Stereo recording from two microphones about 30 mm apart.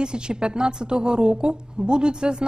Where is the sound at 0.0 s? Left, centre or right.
Right.